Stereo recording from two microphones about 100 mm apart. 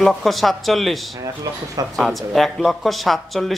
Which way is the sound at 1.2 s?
35° right (ahead or behind).